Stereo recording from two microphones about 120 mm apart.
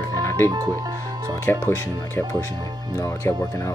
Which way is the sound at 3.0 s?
25° left (ahead or behind).